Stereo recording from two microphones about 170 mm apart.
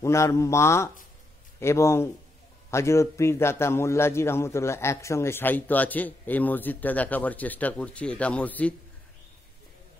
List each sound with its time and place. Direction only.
0.0 s a man's voice: 15° left (ahead or behind)